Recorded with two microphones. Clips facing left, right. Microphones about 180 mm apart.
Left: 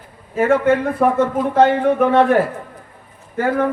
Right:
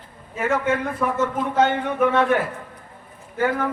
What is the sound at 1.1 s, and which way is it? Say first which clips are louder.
A man's voice: left 6 dB; 30° left (ahead or behind).